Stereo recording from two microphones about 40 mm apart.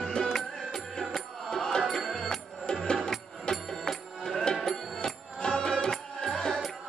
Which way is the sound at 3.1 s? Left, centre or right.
Centre.